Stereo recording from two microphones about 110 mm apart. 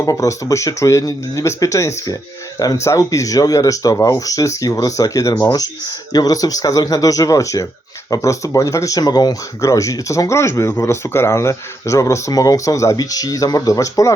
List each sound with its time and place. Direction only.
0.0 s speech: 30° left (ahead or behind)